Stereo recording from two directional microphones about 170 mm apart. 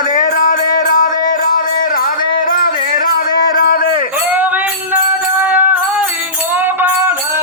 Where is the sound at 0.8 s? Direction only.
50° left (ahead or behind).